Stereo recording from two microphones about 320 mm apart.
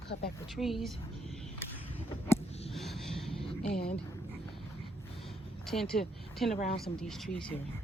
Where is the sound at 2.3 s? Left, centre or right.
Centre.